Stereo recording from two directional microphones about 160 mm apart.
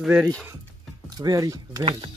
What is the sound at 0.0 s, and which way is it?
Speech, 10° right (ahead or behind).